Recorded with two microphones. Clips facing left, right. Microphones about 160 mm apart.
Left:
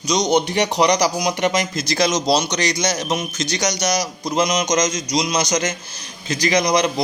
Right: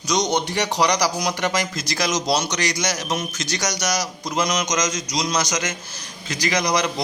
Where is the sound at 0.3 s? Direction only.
20° left (ahead or behind).